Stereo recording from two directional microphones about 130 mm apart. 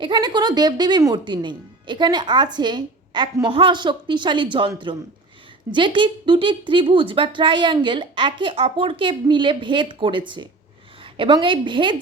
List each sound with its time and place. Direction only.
0.0 s speech: 35° right (ahead or behind)
5.7 s speech: 40° right (ahead or behind)